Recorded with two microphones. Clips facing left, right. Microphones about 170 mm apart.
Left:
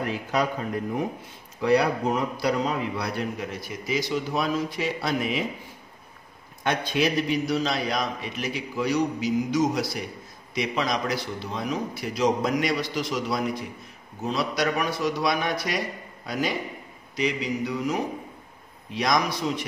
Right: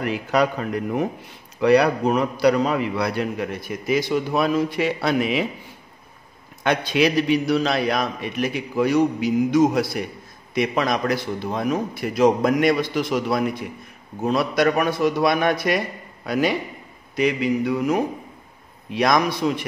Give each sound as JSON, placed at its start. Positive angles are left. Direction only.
{"t": 0.0, "sound": "a man's voice", "side_deg": -75}
{"t": 6.6, "sound": "a man's voice", "side_deg": -80}